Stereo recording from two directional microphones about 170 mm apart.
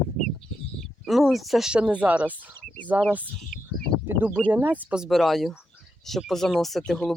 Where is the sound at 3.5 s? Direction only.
65° left (ahead or behind).